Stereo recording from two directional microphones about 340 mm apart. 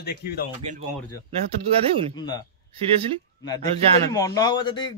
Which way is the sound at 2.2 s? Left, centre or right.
Centre.